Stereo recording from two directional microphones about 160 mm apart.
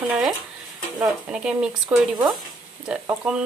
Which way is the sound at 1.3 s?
5° right (ahead or behind).